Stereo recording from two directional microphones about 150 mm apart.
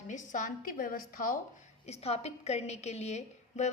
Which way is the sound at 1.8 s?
45° left (ahead or behind).